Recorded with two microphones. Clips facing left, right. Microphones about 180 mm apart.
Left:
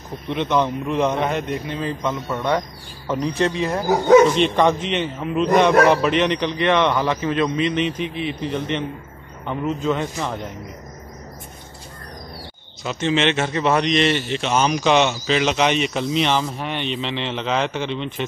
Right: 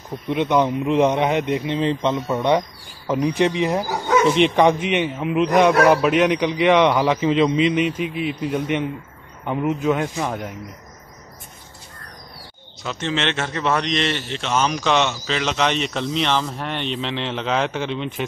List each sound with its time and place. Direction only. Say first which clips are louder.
0.3 s a man's voice: right 2 dB; 10° right (ahead or behind)
12.8 s a man's voice: left 4 dB; 10° left (ahead or behind)